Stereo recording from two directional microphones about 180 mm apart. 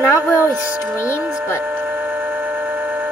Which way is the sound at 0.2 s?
10° right (ahead or behind).